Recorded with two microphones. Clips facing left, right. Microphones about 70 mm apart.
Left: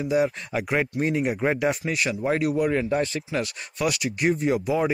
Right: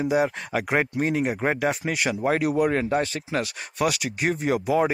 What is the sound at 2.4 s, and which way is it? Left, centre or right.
Speech, right.